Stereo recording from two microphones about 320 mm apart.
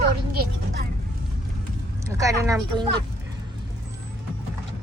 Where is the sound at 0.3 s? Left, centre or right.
Right.